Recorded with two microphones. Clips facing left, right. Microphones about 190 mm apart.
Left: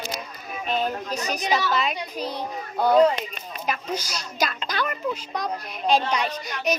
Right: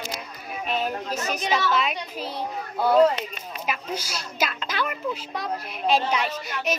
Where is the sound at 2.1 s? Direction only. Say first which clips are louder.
Left 3 dB; 40° left (ahead or behind).